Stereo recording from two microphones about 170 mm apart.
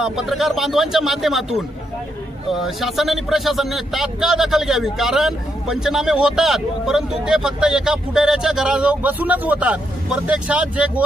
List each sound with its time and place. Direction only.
0.0 s a man's voice: centre (ahead or behind)